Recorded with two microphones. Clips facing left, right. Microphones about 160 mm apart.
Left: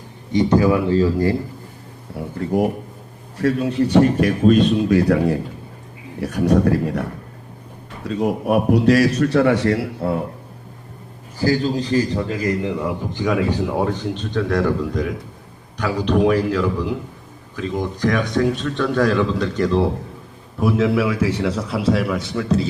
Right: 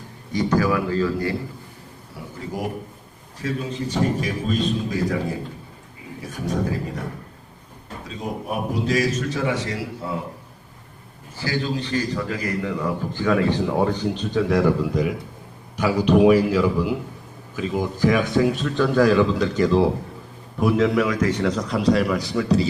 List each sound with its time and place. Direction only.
0.3 s speech: 25° left (ahead or behind)
2.1 s a man's voice: 55° left (ahead or behind)
11.3 s a man's voice: 40° left (ahead or behind); by 22.6 s centre (ahead or behind)